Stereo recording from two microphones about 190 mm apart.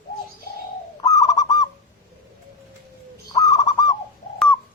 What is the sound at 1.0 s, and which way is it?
Bird, 20° left (ahead or behind).